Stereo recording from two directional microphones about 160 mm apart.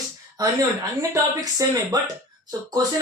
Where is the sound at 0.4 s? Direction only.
20° right (ahead or behind).